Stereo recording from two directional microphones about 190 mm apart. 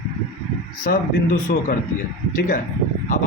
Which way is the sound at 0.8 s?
45° left (ahead or behind).